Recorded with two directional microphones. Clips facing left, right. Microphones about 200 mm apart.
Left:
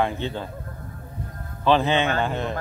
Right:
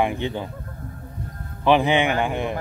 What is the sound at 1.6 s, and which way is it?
Speech, 15° right (ahead or behind).